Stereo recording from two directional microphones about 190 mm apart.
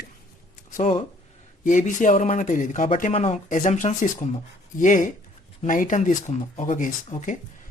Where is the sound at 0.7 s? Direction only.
35° left (ahead or behind).